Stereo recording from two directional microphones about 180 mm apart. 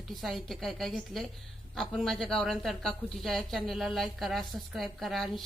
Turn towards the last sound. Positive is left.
turn(degrees=0)  # may be behind; listen again after turning